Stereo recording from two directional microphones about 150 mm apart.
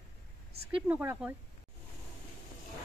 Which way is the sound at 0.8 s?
10° right (ahead or behind).